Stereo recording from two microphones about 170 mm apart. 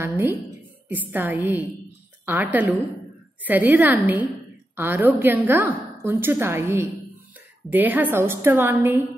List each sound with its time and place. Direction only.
0.8 s a woman's voice: 10° right (ahead or behind)